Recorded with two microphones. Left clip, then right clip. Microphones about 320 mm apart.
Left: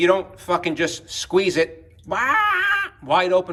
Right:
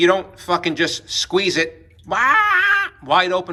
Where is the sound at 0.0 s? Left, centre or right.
Centre.